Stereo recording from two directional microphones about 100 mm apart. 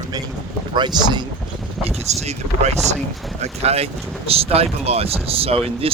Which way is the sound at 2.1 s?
90° right.